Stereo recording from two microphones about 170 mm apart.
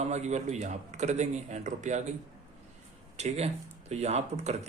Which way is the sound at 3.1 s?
40° right (ahead or behind).